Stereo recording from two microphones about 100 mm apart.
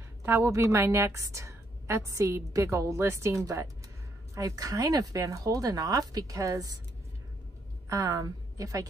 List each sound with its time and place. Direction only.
0.2 s a woman's voice: 30° right (ahead or behind)
7.9 s a woman's voice: 35° right (ahead or behind)